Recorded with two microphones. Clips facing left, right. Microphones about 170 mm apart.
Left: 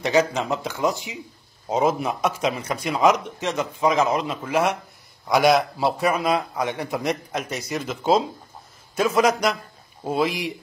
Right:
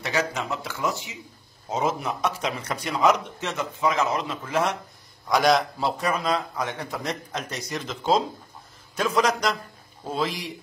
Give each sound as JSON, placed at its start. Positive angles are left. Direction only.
{"t": 0.0, "sound": "a man's voice", "side_deg": 20}